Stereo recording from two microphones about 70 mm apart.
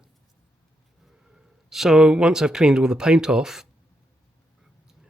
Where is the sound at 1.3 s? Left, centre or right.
Centre.